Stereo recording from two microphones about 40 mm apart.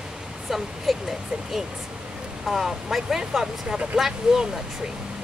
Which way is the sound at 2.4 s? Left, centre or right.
Centre.